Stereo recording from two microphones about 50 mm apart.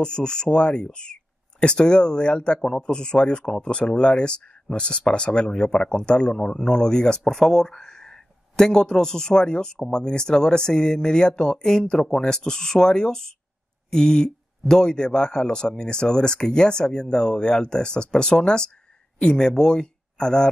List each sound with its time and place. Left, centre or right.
0.0 s speech: centre